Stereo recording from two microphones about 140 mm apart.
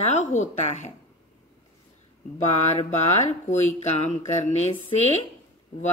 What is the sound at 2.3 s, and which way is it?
Speech, 55° left (ahead or behind).